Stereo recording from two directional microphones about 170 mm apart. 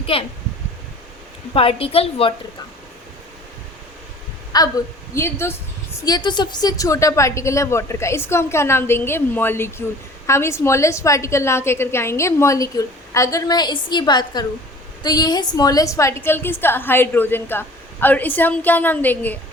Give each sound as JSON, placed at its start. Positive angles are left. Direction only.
{"t": 0.0, "sound": "a child's voice", "side_deg": 35}
{"t": 1.5, "sound": "a woman's voice", "side_deg": 35}
{"t": 4.5, "sound": "a woman's voice", "side_deg": 20}